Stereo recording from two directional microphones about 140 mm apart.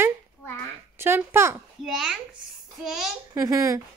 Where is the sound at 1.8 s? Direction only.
5° right (ahead or behind).